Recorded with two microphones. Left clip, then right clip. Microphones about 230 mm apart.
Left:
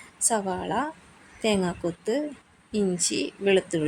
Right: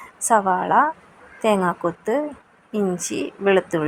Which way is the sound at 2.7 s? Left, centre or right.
Centre.